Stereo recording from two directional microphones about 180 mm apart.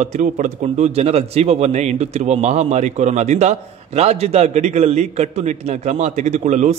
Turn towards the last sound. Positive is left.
turn(degrees=-40)  # may be behind; listen again after turning